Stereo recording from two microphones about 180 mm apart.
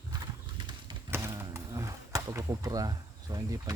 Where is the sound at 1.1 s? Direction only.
15° right (ahead or behind).